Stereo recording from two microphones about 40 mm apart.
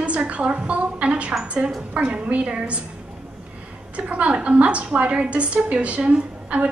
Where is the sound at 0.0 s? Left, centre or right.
Right.